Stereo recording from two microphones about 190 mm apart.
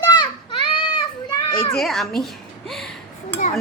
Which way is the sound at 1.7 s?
Centre (ahead or behind).